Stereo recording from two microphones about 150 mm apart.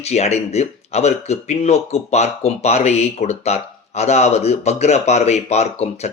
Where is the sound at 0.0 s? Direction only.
45° left (ahead or behind).